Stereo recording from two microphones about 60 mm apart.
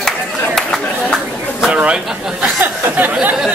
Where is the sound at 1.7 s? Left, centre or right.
Centre.